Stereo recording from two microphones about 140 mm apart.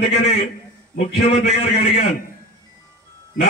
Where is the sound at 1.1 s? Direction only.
55° left (ahead or behind).